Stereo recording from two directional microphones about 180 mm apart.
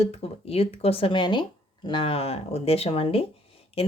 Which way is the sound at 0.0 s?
35° left (ahead or behind).